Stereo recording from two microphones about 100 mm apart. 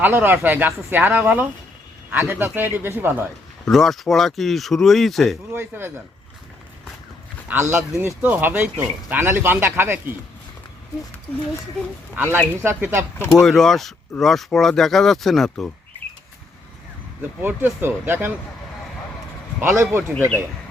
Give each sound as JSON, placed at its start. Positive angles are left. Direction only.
{"t": 0.0, "sound": "speech", "side_deg": -20}
{"t": 3.7, "sound": "speech", "side_deg": 5}
{"t": 5.5, "sound": "speech", "side_deg": -20}
{"t": 7.4, "sound": "speech", "side_deg": -25}
{"t": 12.1, "sound": "speech", "side_deg": -20}
{"t": 13.3, "sound": "speech", "side_deg": 5}
{"t": 17.4, "sound": "speech", "side_deg": -20}
{"t": 19.5, "sound": "speech", "side_deg": -25}